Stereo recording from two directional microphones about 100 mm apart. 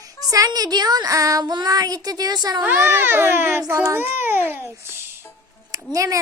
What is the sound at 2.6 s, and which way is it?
A child's voice, 25° right (ahead or behind).